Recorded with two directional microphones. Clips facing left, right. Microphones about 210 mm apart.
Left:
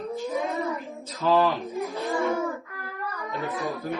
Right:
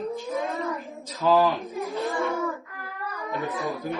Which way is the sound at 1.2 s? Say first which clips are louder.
Right 1 dB; centre (ahead or behind).